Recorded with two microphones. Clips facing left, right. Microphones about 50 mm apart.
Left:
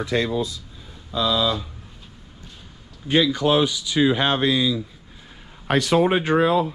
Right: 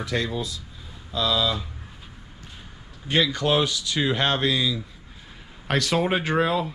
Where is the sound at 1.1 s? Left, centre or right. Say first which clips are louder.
Left 2 dB; centre.